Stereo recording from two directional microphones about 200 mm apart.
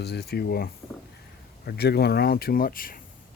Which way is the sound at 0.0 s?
55° left (ahead or behind).